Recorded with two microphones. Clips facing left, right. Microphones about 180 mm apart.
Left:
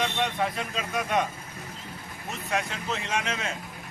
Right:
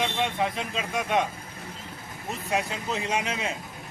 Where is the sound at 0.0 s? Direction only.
5° right (ahead or behind).